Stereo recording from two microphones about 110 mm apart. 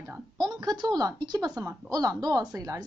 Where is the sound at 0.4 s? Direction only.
40° right (ahead or behind).